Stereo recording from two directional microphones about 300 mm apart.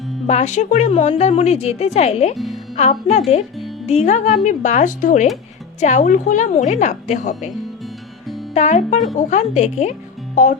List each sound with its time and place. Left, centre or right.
0.3 s a woman's voice: left
2.3 s speech: centre
2.7 s a woman's voice: left
8.5 s a woman's voice: left